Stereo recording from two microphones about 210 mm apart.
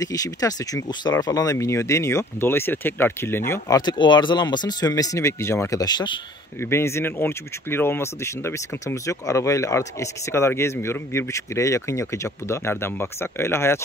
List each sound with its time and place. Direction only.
0.0 s speech: 15° left (ahead or behind)